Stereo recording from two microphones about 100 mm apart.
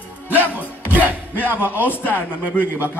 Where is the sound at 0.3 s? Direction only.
15° right (ahead or behind).